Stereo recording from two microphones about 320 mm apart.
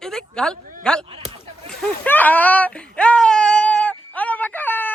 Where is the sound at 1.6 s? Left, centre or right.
Centre.